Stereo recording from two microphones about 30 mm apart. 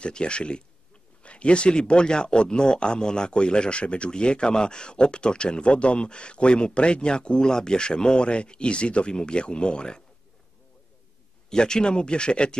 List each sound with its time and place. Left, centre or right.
0.0 s speech: left
11.5 s speech: left